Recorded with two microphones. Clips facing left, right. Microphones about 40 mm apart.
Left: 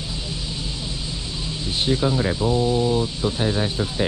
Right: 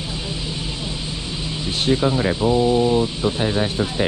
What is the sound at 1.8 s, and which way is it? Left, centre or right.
Speech, right.